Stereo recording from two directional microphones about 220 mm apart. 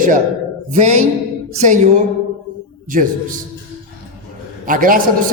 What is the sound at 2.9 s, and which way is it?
Speech, 40° right (ahead or behind).